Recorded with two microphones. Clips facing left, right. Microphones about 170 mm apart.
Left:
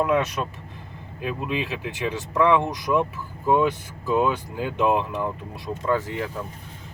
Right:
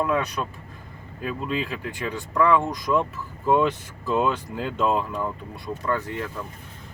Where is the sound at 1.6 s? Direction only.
80° left.